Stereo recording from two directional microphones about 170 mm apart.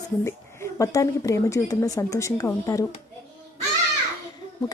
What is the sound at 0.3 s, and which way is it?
A woman's voice, 15° left (ahead or behind).